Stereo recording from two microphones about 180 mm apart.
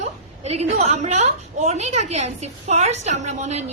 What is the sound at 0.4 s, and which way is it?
A woman's voice, 35° right (ahead or behind).